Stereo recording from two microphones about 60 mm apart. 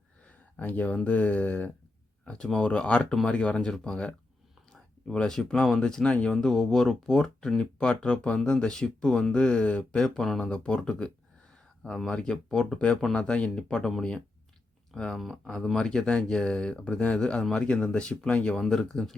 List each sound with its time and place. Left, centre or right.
0.5 s speech: left
10.0 s speech: centre
15.1 s speech: centre
15.8 s speech: centre